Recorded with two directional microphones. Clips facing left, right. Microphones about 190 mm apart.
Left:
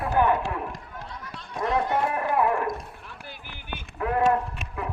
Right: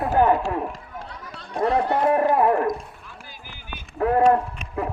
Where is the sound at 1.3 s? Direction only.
35° right (ahead or behind).